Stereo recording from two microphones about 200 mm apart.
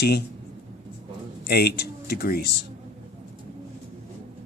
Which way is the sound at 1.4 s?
50° left (ahead or behind).